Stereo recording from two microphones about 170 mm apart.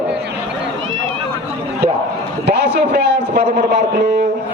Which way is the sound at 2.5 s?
75° right (ahead or behind).